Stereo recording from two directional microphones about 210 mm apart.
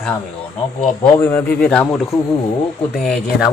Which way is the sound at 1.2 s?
10° left (ahead or behind).